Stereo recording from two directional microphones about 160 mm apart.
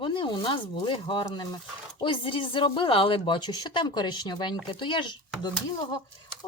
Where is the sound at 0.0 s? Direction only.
30° left (ahead or behind).